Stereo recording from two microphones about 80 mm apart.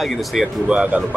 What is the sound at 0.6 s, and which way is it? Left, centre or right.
Speech, centre.